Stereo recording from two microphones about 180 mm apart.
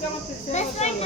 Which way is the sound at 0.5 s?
35° left (ahead or behind).